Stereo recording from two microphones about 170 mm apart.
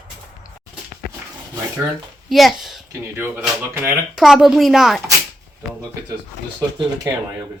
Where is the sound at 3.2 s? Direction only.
15° right (ahead or behind).